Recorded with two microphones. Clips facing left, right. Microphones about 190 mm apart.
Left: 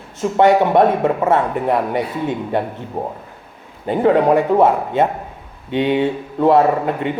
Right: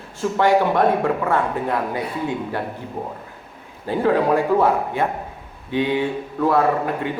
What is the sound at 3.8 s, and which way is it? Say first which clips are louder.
A man's voice: left 5 dB; 20° left (ahead or behind).